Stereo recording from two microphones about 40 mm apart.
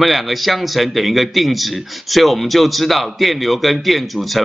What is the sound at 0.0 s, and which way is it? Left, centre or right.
A man's voice, centre.